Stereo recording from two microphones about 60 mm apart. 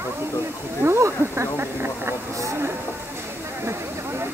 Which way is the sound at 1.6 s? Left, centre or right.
Right.